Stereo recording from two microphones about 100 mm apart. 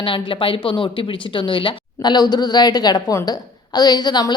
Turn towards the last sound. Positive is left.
turn(degrees=45)  # may be behind; listen again after turning